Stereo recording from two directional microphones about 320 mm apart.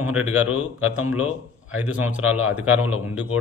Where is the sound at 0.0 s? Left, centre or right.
Centre.